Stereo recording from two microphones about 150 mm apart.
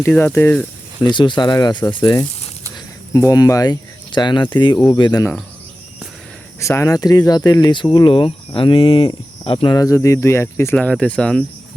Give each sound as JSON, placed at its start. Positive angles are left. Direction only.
{"t": 0.0, "sound": "speech", "side_deg": 10}
{"t": 1.0, "sound": "speech", "side_deg": 30}
{"t": 2.7, "sound": "cricket", "side_deg": 20}
{"t": 4.5, "sound": "speech", "side_deg": 30}
{"t": 6.6, "sound": "speech", "side_deg": 20}
{"t": 10.8, "sound": "speech", "side_deg": 5}